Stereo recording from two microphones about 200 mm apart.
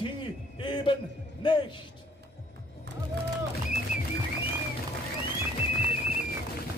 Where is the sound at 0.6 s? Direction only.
25° left (ahead or behind).